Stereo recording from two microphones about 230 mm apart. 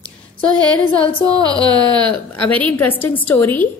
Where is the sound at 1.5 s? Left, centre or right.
Centre.